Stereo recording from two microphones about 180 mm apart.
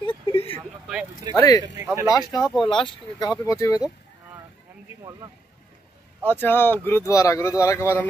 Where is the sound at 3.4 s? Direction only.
15° left (ahead or behind).